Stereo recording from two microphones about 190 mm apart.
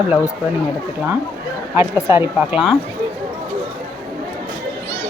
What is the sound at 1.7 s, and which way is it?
Speech, 10° right (ahead or behind).